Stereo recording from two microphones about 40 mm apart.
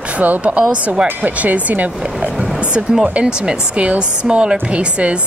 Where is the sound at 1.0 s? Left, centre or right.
Right.